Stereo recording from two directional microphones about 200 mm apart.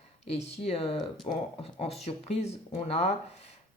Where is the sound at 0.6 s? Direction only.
30° left (ahead or behind).